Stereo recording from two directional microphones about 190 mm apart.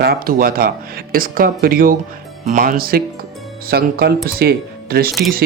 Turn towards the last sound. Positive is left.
turn(degrees=-55)  # may be behind; listen again after turning